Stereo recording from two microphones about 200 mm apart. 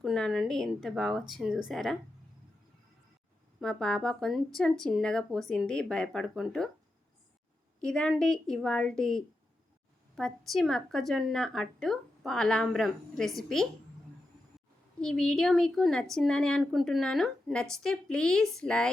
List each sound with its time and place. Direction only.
0.0 s a woman's voice: centre (ahead or behind)
3.6 s a woman's voice: 5° left (ahead or behind)
7.8 s a woman's voice: 5° left (ahead or behind)
14.9 s a woman's voice: 5° left (ahead or behind)